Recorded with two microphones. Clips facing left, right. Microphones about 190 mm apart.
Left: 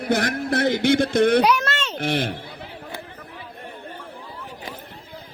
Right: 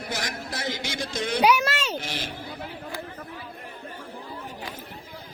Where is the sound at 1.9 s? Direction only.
60° left (ahead or behind).